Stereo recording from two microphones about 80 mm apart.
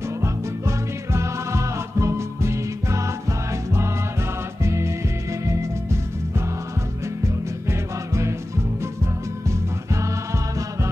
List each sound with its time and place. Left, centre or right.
0.2 s music: right
4.6 s music: right
7.6 s music: right